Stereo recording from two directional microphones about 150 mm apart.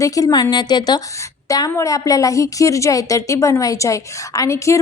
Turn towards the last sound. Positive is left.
turn(degrees=20)  # may be behind; listen again after turning